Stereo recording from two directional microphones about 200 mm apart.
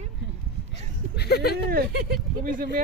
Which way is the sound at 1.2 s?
55° left (ahead or behind).